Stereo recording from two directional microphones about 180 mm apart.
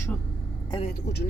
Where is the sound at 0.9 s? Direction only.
65° left (ahead or behind).